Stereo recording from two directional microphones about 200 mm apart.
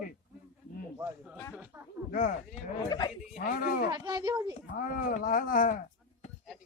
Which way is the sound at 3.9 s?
20° right (ahead or behind).